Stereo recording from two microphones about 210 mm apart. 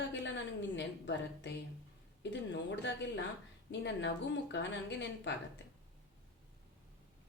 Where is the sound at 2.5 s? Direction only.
55° left (ahead or behind).